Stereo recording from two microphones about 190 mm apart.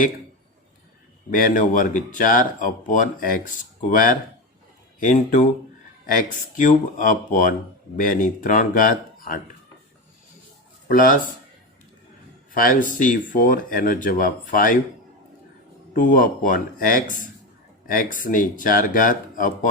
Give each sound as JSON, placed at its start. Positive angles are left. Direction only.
{"t": 1.3, "sound": "speech", "side_deg": 45}
{"t": 6.6, "sound": "speech", "side_deg": 45}
{"t": 10.8, "sound": "speech", "side_deg": 45}
{"t": 12.5, "sound": "speech", "side_deg": 45}
{"t": 15.9, "sound": "speech", "side_deg": 45}